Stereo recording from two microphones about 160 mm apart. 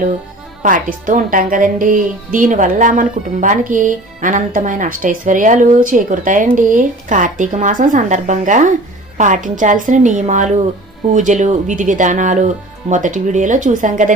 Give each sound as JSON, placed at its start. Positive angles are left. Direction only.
{"t": 0.6, "sound": "a woman's voice", "side_deg": -60}